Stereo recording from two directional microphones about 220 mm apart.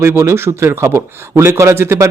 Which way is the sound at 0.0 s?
10° right (ahead or behind).